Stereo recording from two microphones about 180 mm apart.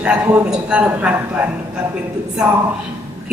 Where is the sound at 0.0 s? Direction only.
5° right (ahead or behind).